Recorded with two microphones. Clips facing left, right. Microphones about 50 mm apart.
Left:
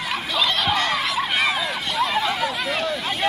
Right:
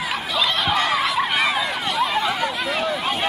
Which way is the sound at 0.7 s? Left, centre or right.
Centre.